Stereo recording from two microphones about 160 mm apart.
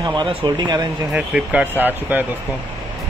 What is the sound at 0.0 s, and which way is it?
Speech, 30° right (ahead or behind).